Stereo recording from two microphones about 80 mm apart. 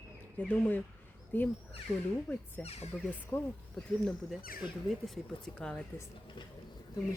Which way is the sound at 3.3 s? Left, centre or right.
Left.